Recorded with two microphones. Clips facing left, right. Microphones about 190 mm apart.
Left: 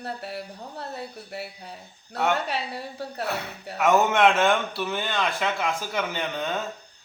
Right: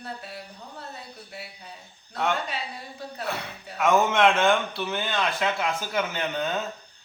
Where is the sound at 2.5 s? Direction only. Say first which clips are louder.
Left 4 dB; 65° left (ahead or behind).